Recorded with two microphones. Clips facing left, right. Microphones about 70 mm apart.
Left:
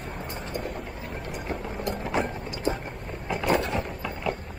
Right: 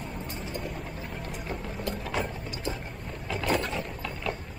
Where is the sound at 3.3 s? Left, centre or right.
Centre.